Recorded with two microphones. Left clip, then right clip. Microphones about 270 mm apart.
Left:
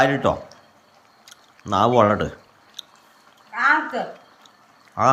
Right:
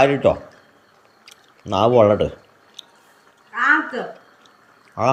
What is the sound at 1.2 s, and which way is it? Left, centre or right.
Chewing, centre.